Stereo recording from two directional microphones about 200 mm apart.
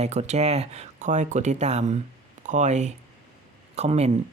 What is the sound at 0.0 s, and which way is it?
Speech, 35° right (ahead or behind).